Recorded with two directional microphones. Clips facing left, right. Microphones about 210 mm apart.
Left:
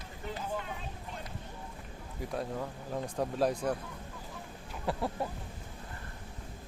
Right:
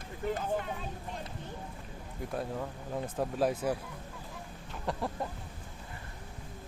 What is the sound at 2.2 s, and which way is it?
Speech, centre (ahead or behind).